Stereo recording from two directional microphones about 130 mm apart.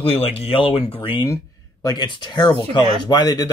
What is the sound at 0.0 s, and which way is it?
Speech, 50° left (ahead or behind).